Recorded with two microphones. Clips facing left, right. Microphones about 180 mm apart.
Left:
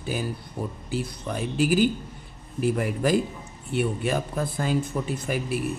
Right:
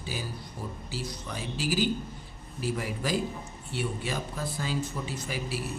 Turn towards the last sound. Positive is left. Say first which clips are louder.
# left 7 dB
turn(degrees=55)  # may be behind; listen again after turning